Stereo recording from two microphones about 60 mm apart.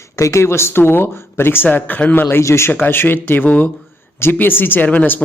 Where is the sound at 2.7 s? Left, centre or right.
Left.